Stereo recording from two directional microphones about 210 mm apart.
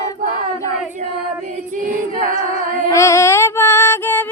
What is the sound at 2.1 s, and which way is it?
A capella, 40° right (ahead or behind).